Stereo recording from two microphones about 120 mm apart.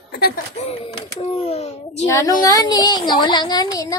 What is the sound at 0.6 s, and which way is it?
A child's voice, 55° left (ahead or behind).